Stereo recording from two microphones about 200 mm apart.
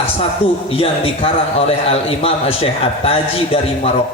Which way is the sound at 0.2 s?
30° left (ahead or behind).